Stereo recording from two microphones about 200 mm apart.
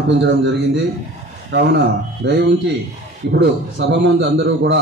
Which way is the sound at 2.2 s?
60° right (ahead or behind).